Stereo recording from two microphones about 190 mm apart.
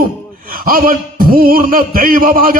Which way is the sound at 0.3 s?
50° right (ahead or behind).